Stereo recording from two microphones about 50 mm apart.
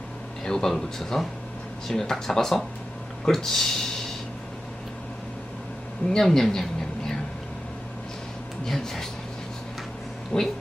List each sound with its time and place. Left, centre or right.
0.4 s speech: centre
6.1 s a woman's voice: centre
8.6 s speech: centre
10.3 s speech: left